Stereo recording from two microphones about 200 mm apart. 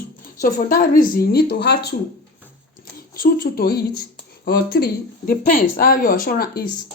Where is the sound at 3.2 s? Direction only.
45° left (ahead or behind).